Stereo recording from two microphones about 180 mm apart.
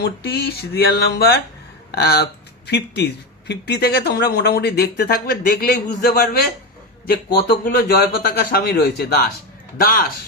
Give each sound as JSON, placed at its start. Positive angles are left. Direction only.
{"t": 0.0, "sound": "speech", "side_deg": 65}
{"t": 7.6, "sound": "speech", "side_deg": 65}
{"t": 9.8, "sound": "speech", "side_deg": 55}